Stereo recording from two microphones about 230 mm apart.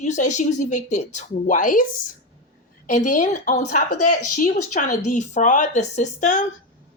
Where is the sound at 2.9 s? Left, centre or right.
Left.